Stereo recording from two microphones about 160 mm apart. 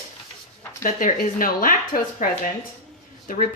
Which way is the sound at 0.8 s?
60° left (ahead or behind).